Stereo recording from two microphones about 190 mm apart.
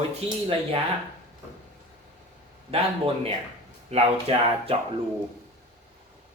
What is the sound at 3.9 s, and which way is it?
Speech, 30° right (ahead or behind).